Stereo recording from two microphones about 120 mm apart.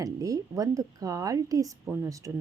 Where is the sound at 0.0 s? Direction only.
30° right (ahead or behind).